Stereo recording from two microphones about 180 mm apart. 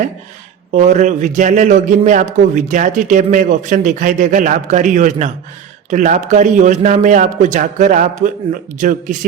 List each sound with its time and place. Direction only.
0.7 s a man's voice: 40° right (ahead or behind)